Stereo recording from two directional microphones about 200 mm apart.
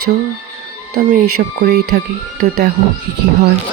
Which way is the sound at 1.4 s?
45° right (ahead or behind).